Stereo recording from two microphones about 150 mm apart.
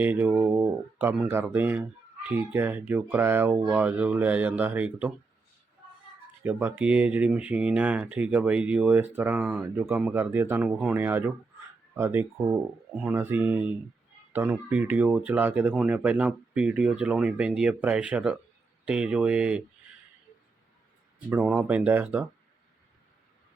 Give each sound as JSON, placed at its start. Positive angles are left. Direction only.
{"t": 0.0, "sound": "speech", "side_deg": -10}
{"t": 6.4, "sound": "speech", "side_deg": -10}
{"t": 9.4, "sound": "speech", "side_deg": 0}
{"t": 9.7, "sound": "speech", "side_deg": -15}
{"t": 21.7, "sound": "speech", "side_deg": -10}